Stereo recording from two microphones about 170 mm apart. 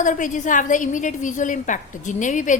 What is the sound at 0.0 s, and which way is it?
A woman's voice, 50° left (ahead or behind).